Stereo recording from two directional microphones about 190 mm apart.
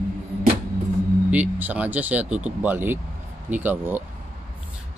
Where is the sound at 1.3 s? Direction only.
10° right (ahead or behind).